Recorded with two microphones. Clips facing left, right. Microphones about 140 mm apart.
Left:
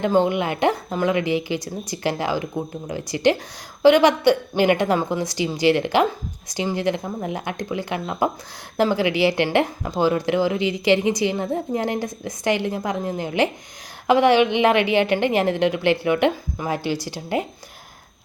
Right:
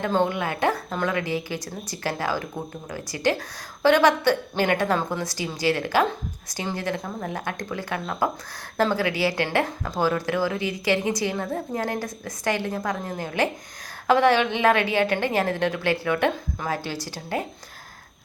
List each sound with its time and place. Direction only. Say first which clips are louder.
0.0 s a woman's voice: left 4 dB; 15° left (ahead or behind)